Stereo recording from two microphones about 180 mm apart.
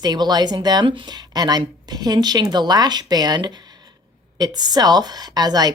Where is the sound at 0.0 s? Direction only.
25° right (ahead or behind).